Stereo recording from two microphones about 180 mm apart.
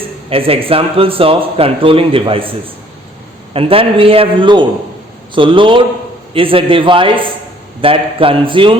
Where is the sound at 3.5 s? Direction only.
30° right (ahead or behind).